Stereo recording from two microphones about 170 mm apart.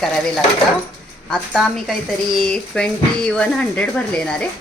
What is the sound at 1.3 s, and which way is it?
Speech, 5° left (ahead or behind).